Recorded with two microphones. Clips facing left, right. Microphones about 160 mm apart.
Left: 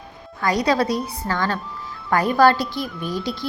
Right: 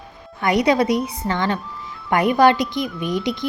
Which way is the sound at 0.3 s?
20° right (ahead or behind).